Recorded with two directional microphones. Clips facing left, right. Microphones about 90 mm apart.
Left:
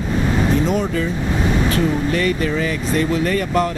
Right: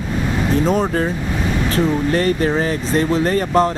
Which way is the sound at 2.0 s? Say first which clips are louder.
Right 2 dB; 40° right (ahead or behind).